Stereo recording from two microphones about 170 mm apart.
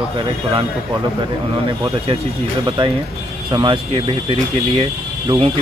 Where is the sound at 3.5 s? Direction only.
30° right (ahead or behind).